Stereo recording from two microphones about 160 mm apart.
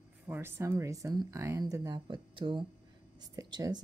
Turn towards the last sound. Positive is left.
turn(degrees=-25)  # may be behind; listen again after turning